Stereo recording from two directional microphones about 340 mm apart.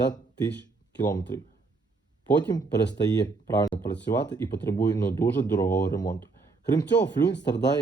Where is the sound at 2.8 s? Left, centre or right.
Left.